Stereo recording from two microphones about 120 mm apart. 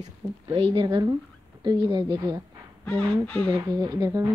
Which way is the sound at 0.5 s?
45° right (ahead or behind).